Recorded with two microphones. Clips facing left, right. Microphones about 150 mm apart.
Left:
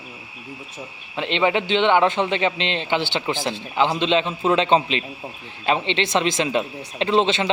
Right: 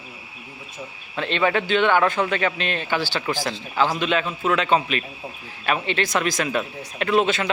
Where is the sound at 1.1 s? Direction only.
20° left (ahead or behind).